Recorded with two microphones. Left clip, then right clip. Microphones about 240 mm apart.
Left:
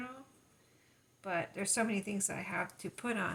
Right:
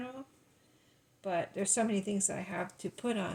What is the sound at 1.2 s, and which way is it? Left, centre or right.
Speech, centre.